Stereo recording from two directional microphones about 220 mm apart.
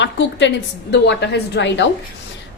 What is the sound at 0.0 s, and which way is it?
A woman's voice, 55° left (ahead or behind).